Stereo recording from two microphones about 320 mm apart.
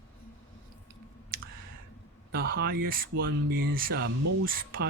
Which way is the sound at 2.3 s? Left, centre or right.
Right.